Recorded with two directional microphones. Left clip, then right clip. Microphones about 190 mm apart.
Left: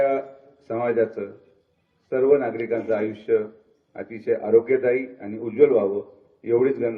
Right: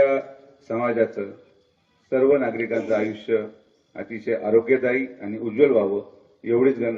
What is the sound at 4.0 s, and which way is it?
Speech, 5° right (ahead or behind).